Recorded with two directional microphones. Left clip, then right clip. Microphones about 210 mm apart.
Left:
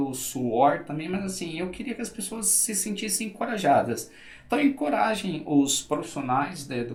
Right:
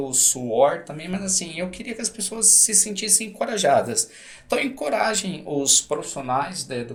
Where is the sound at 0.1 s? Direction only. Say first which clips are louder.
Right 6 dB; 50° right (ahead or behind).